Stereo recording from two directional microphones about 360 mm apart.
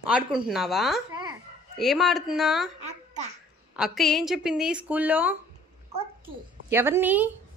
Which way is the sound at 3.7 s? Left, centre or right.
Centre.